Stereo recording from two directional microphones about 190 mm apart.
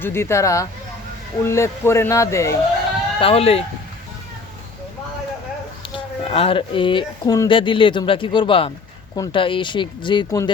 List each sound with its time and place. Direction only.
0.0 s speech: 15° left (ahead or behind)
3.2 s speech: 30° left (ahead or behind)
5.9 s speech: 30° left (ahead or behind)